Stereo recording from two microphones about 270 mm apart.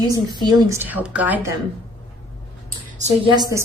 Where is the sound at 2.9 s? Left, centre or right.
Centre.